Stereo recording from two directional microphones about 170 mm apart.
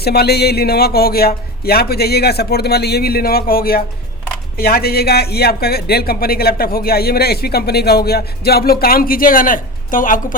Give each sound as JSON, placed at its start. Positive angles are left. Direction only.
{"t": 0.0, "sound": "a man's voice", "side_deg": 70}